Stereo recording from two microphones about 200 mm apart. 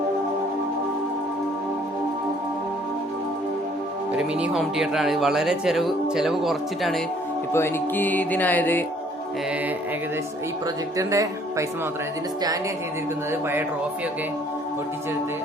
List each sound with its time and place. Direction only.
4.1 s speech: 5° right (ahead or behind)
7.5 s speech: 10° left (ahead or behind)
10.9 s speech: 15° right (ahead or behind)